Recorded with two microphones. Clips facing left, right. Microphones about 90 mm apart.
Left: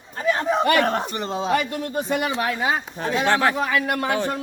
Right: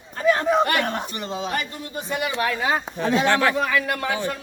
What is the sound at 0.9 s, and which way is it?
Speech, 35° left (ahead or behind).